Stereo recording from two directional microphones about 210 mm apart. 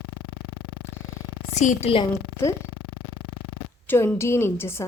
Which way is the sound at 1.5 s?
35° left (ahead or behind).